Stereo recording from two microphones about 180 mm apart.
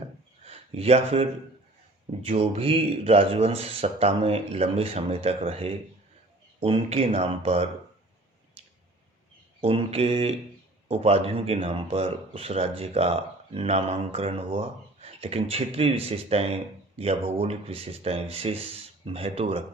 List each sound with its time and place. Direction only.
0.4 s speech: 35° right (ahead or behind)
9.6 s speech: 35° right (ahead or behind)